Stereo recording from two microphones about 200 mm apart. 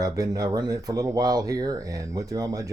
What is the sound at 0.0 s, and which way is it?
Speech, 20° right (ahead or behind).